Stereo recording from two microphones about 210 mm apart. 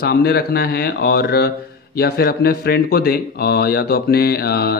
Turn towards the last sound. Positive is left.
turn(degrees=50)  # may be behind; listen again after turning